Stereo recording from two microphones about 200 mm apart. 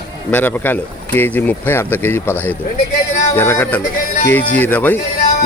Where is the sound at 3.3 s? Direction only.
10° left (ahead or behind).